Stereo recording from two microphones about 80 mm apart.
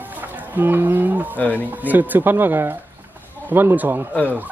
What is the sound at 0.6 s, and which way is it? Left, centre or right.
Speech, right.